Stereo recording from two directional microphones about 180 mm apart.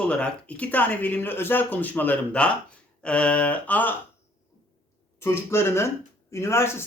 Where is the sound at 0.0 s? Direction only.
5° left (ahead or behind).